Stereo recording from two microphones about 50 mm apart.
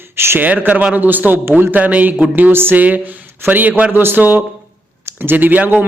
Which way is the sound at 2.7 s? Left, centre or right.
Right.